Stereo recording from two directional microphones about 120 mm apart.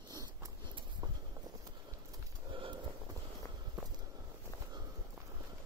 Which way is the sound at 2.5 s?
45° right (ahead or behind).